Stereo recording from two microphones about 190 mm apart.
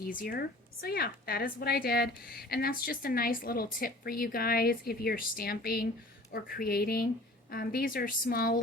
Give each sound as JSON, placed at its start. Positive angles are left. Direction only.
{"t": 0.2, "sound": "a woman's voice", "side_deg": 50}